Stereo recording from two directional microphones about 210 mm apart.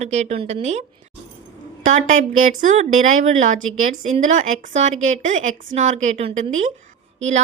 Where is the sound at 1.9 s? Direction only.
35° right (ahead or behind).